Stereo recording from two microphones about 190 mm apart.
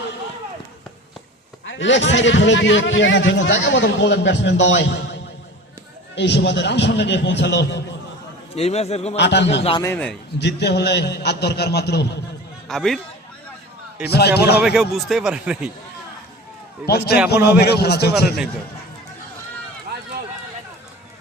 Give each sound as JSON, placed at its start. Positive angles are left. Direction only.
{"t": 1.6, "sound": "a man's voice", "side_deg": 75}
{"t": 6.1, "sound": "a man's voice", "side_deg": 65}
{"t": 8.5, "sound": "a man's voice", "side_deg": 35}
{"t": 9.1, "sound": "a man's voice", "side_deg": 65}
{"t": 9.8, "sound": "a man's voice", "side_deg": 10}
{"t": 10.4, "sound": "a man's voice", "side_deg": 60}
{"t": 12.6, "sound": "speech", "side_deg": 0}
{"t": 14.1, "sound": "a man's voice", "side_deg": 60}
{"t": 14.6, "sound": "speech", "side_deg": 0}
{"t": 16.8, "sound": "a man's voice", "side_deg": 55}